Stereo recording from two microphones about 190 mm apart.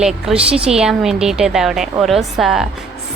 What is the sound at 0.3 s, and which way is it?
A woman's voice, 5° right (ahead or behind).